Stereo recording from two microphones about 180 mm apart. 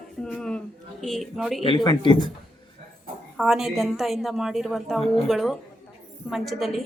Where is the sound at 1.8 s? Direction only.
25° left (ahead or behind).